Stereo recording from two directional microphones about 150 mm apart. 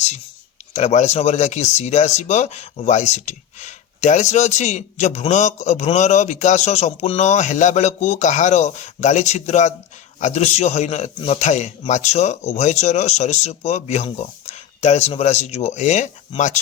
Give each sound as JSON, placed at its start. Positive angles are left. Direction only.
{"t": 0.7, "sound": "speech", "side_deg": 50}